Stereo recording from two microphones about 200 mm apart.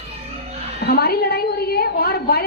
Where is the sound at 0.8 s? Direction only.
50° left (ahead or behind).